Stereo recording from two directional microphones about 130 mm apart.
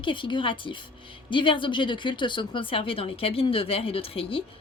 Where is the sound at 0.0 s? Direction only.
40° left (ahead or behind).